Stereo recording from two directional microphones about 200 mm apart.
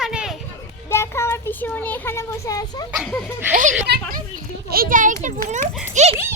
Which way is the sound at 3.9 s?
55° right (ahead or behind).